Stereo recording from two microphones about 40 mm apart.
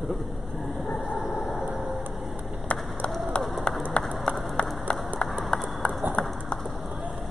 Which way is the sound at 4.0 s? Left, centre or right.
Left.